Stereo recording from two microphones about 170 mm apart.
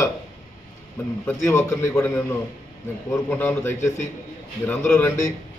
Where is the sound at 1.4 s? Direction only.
15° left (ahead or behind).